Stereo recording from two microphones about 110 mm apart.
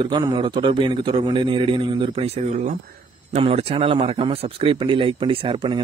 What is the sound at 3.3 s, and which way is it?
A man's voice, 70° right (ahead or behind).